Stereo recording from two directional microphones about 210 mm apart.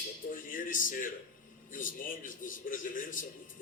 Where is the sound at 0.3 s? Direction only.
40° left (ahead or behind).